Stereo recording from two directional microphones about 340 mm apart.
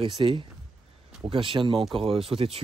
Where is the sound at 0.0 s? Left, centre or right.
Centre.